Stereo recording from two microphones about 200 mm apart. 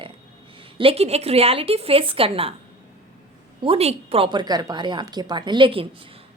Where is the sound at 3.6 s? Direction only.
30° right (ahead or behind).